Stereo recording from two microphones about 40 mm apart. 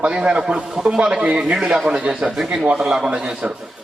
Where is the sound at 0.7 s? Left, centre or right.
Centre.